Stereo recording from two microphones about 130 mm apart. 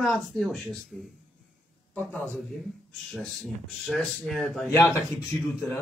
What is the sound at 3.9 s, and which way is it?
Speech, 5° left (ahead or behind).